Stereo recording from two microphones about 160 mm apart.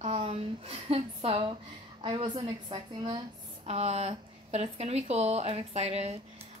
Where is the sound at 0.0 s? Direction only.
40° right (ahead or behind).